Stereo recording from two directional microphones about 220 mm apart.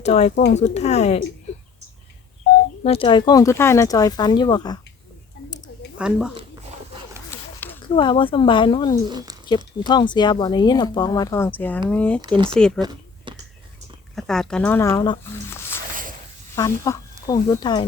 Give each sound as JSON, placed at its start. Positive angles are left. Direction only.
{"t": 0.0, "sound": "speech", "side_deg": 30}
{"t": 2.8, "sound": "speech", "side_deg": 25}
{"t": 6.0, "sound": "speech", "side_deg": -5}
{"t": 7.3, "sound": "a sound", "side_deg": 10}
{"t": 7.9, "sound": "speech", "side_deg": 20}
{"t": 9.0, "sound": "speech", "side_deg": -20}
{"t": 9.8, "sound": "speech", "side_deg": 20}
{"t": 12.8, "sound": "a sound", "side_deg": -20}
{"t": 14.2, "sound": "speech", "side_deg": 0}